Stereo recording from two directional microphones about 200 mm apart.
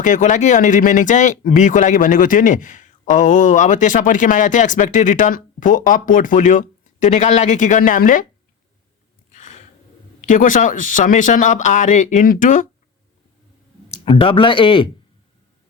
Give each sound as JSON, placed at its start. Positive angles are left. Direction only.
{"t": 0.0, "sound": "speech", "side_deg": 40}
{"t": 9.3, "sound": "gasp", "side_deg": 40}
{"t": 10.2, "sound": "speech", "side_deg": 40}
{"t": 13.9, "sound": "speech", "side_deg": 25}